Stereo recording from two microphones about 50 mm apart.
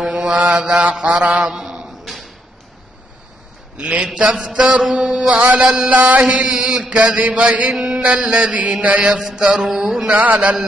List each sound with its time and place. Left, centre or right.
0.0 s mantra: centre
0.4 s mantra: right
1.5 s a sound: centre
2.0 s a sound: centre
3.7 s mantra: right
4.8 s mantra: centre
7.7 s a sound: centre
8.0 s mantra: right
9.3 s mantra: centre
10.0 s mantra: right
10.3 s mantra: centre